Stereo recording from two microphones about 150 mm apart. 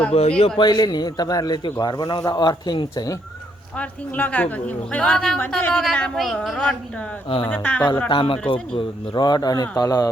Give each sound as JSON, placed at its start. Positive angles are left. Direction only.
{"t": 0.1, "sound": "a man's voice", "side_deg": 40}
{"t": 3.8, "sound": "a woman's voice", "side_deg": 10}
{"t": 7.3, "sound": "speech", "side_deg": 35}
{"t": 7.5, "sound": "a woman's voice", "side_deg": 10}
{"t": 8.1, "sound": "a man's voice", "side_deg": 35}